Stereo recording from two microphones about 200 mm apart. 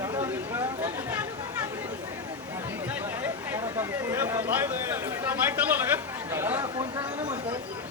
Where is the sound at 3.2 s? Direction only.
10° right (ahead or behind).